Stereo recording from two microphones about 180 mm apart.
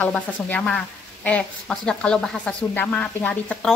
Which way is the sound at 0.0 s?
5° left (ahead or behind).